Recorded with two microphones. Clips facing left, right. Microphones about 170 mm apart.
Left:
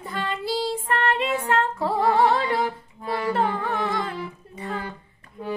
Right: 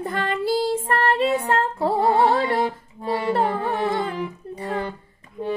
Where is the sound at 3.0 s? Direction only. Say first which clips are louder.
Right 2 dB; 30° right (ahead or behind).